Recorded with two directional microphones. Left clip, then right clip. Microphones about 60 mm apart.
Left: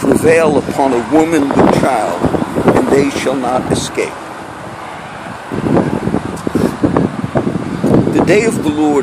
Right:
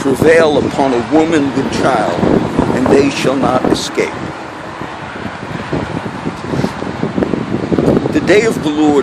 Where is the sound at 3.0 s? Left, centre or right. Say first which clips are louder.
Right 2 dB; right.